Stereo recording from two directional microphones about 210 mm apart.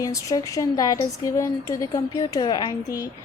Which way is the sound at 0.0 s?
15° left (ahead or behind).